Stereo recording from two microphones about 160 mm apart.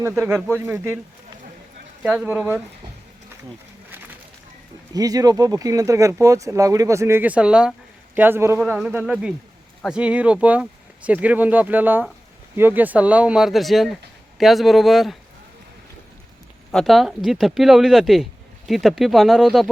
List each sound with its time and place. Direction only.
0.2 s speech: 15° right (ahead or behind)
2.0 s speech: 10° right (ahead or behind)
4.9 s speech: 25° right (ahead or behind); by 15.2 s centre (ahead or behind)
16.7 s speech: centre (ahead or behind)